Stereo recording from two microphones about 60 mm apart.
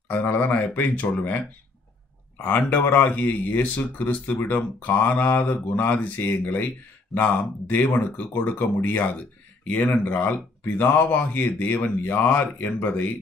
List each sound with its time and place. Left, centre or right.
0.1 s speech: left